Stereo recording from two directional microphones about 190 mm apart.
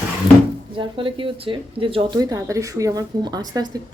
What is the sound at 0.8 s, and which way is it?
A woman's voice, 25° right (ahead or behind).